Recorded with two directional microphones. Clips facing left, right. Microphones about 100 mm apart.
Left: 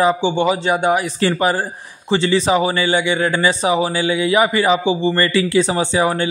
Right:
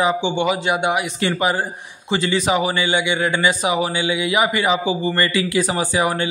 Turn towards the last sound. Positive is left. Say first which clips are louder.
# left 3 dB
turn(degrees=30)  # may be behind; listen again after turning